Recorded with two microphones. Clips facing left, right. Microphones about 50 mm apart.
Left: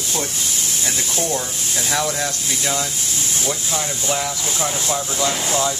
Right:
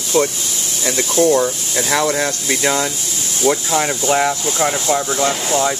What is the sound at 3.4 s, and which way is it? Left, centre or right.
Speech, right.